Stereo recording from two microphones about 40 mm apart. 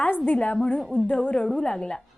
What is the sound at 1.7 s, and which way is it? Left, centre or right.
Speech, centre.